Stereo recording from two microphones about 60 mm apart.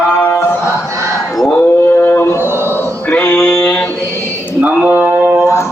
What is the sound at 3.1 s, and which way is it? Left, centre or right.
Music, left.